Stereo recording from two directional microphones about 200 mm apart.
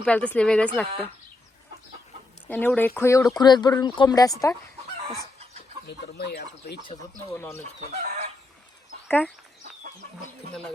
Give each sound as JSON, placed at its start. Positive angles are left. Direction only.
{"t": 0.0, "sound": "speech", "side_deg": 5}
{"t": 2.5, "sound": "speech", "side_deg": 10}
{"t": 5.9, "sound": "speech", "side_deg": 55}
{"t": 7.3, "sound": "speech", "side_deg": 10}
{"t": 7.8, "sound": "speech", "side_deg": -40}
{"t": 9.0, "sound": "speech", "side_deg": 10}